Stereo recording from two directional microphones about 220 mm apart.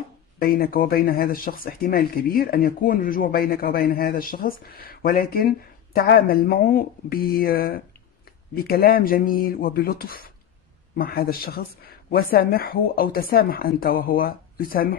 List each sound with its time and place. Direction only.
0.4 s speech: 40° left (ahead or behind)